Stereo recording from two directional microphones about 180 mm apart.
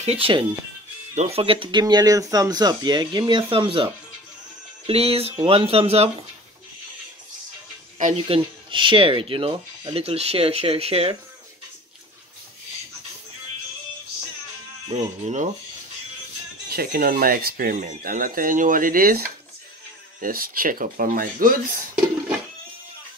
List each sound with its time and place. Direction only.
0.0 s speech: 30° right (ahead or behind)
8.0 s speech: 35° right (ahead or behind)
14.9 s speech: 40° right (ahead or behind)
16.6 s speech: 55° right (ahead or behind)